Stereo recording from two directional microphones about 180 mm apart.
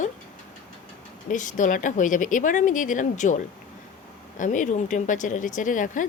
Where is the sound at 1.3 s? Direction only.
45° left (ahead or behind).